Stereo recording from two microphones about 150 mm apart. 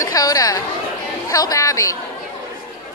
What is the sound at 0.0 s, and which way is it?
A woman's voice, 25° left (ahead or behind).